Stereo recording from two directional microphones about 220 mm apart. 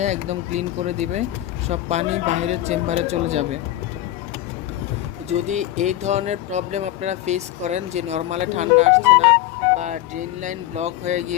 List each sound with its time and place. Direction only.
0.0 s speech: 30° right (ahead or behind)
5.3 s speech: 30° right (ahead or behind)